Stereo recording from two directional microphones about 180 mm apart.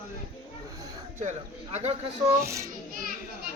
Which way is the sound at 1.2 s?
40° right (ahead or behind).